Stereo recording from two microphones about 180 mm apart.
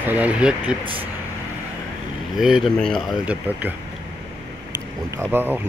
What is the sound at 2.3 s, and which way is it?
Speech, centre (ahead or behind).